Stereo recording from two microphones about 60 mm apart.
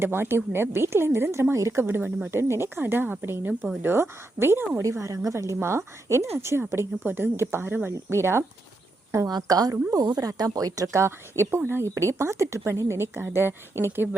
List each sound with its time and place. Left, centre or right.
0.0 s a woman's voice: right
1.8 s a woman's voice: right
4.8 s a woman's voice: right
5.5 s a woman's voice: right
7.0 s speech: right
9.2 s speech: right
11.0 s a woman's voice: right